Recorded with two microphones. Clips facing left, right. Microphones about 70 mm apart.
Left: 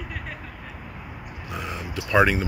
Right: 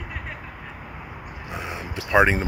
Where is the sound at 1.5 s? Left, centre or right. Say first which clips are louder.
Even; right.